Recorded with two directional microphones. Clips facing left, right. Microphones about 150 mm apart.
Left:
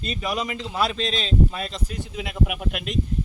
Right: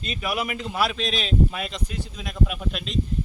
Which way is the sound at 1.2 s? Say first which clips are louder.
Right 1 dB; 30° left (ahead or behind).